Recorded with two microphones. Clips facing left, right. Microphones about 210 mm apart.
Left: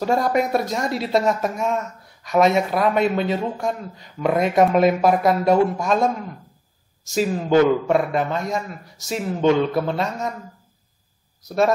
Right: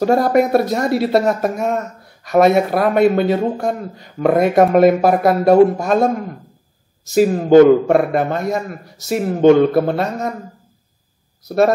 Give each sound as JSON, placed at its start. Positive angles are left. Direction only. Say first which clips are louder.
{"t": 0.0, "sound": "a man's voice", "louder": "right 6 dB", "side_deg": -55}
{"t": 7.2, "sound": "a man's voice", "louder": "right 8 dB", "side_deg": -40}
{"t": 11.4, "sound": "speech", "louder": "right 5 dB", "side_deg": -60}